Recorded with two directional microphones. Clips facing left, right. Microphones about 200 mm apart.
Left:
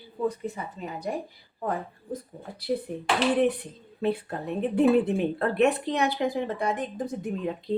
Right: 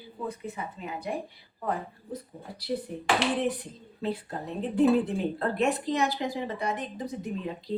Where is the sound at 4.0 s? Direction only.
60° left (ahead or behind).